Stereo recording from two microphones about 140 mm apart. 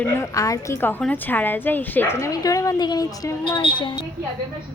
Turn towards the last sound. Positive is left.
turn(degrees=35)  # may be behind; listen again after turning